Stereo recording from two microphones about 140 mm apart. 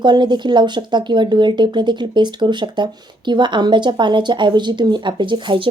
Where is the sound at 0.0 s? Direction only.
30° right (ahead or behind).